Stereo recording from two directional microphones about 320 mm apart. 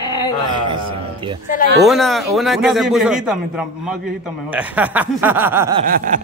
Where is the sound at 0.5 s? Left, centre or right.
Centre.